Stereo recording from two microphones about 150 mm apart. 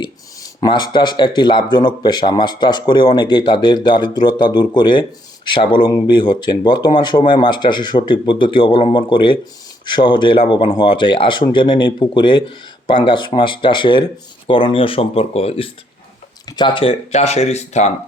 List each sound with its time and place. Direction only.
0.0 s speech: 30° left (ahead or behind); by 17.9 s 45° left (ahead or behind)